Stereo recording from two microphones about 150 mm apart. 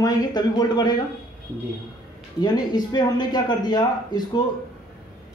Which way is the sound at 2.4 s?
30° left (ahead or behind).